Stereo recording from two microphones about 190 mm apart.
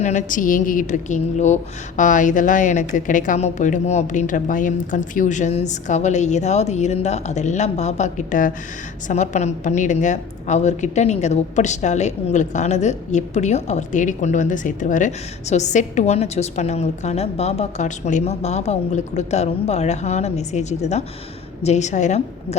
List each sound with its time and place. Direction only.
0.0 s a woman's voice: 40° left (ahead or behind)